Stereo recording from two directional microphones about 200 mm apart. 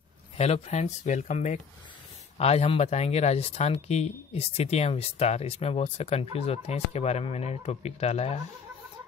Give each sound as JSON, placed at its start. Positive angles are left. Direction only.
{"t": 0.4, "sound": "speech", "side_deg": 30}